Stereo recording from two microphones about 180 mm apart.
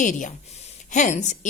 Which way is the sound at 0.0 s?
45° left (ahead or behind).